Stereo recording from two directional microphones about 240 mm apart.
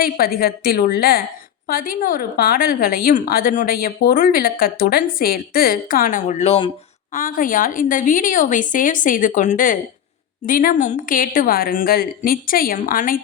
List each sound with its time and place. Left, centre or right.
0.0 s a woman's voice: left